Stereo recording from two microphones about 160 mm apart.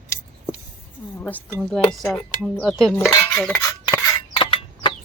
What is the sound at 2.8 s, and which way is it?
Cutlery, 5° left (ahead or behind).